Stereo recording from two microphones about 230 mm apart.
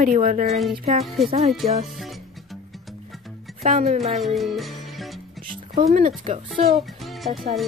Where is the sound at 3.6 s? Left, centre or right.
Right.